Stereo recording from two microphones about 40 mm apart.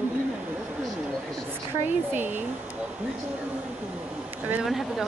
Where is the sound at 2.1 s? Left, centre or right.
Right.